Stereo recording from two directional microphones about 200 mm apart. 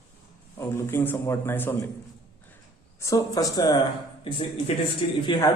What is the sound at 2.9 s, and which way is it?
Speech, 15° left (ahead or behind).